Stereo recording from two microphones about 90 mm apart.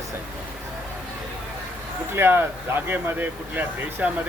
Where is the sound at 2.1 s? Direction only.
25° right (ahead or behind).